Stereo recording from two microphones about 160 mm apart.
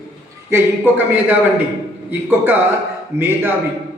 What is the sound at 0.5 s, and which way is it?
Speech, 10° right (ahead or behind).